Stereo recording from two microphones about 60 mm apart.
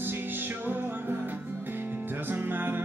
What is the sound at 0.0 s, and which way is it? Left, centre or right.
Music, right.